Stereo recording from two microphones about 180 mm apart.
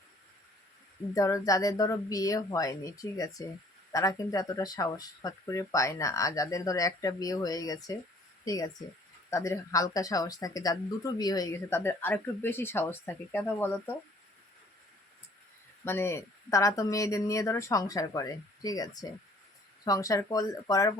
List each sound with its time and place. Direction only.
1.1 s speech: 20° left (ahead or behind)
15.8 s speech: 15° left (ahead or behind)